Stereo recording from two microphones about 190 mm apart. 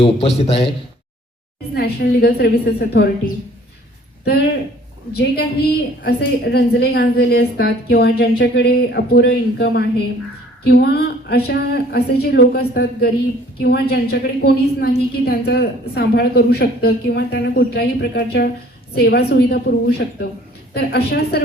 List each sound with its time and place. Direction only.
0.0 s a man's voice: 35° left (ahead or behind)
1.7 s a woman's voice: 55° left (ahead or behind)
5.1 s a woman's voice: 55° left (ahead or behind)